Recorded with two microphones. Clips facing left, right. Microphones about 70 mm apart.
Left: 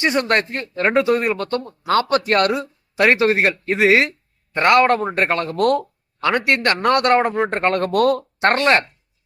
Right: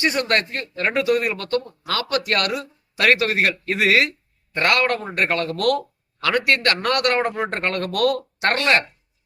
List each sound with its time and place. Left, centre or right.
0.0 s speech: left